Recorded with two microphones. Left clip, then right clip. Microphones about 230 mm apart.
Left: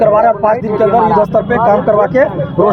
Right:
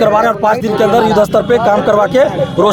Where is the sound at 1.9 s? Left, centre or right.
Right.